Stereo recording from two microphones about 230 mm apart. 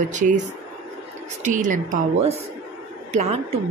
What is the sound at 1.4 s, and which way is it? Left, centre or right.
Speech, right.